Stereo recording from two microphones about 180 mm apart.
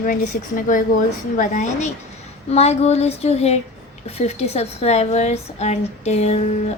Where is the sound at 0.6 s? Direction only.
50° left (ahead or behind).